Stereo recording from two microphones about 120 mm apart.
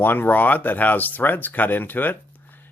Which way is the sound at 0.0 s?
15° left (ahead or behind).